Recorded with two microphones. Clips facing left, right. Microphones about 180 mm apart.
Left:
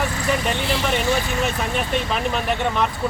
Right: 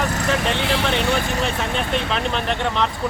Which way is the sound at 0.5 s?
70° right (ahead or behind).